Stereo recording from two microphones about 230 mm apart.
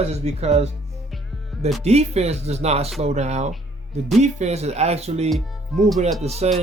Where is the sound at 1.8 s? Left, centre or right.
Right.